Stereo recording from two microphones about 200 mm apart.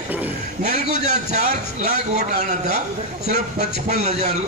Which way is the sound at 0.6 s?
35° right (ahead or behind).